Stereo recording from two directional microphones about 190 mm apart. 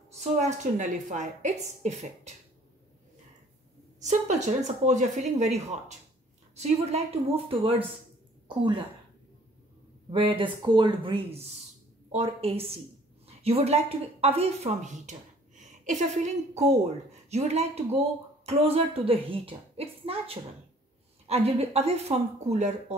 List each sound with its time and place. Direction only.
0.2 s speech: 40° right (ahead or behind)
4.0 s a woman's voice: 40° right (ahead or behind)
10.1 s speech: 30° right (ahead or behind)